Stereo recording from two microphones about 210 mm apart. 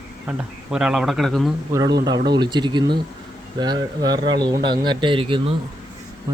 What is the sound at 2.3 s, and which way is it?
Speech, 20° right (ahead or behind).